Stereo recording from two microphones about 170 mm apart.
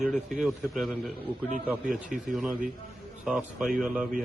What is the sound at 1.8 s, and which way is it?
Speech, 50° right (ahead or behind).